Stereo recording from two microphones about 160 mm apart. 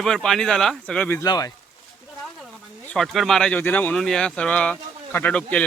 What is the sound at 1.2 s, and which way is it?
Speech, 25° left (ahead or behind).